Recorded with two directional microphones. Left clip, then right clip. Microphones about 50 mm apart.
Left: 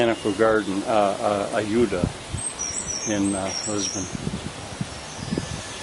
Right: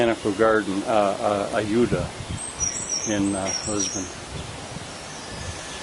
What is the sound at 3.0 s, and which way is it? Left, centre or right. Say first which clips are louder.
Speech: left 1 dB; centre.